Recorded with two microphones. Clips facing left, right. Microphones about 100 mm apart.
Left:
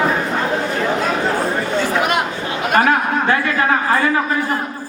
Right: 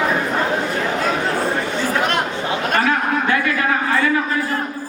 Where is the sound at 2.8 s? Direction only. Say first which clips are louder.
Left 5 dB; 45° left (ahead or behind).